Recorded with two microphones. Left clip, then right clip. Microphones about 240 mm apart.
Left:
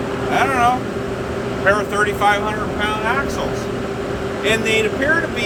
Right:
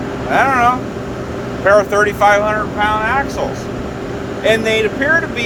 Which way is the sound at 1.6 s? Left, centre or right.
Centre.